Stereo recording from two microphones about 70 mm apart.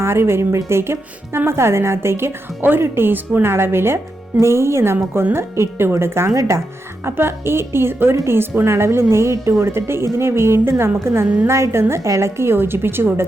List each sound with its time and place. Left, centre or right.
0.0 s speech: right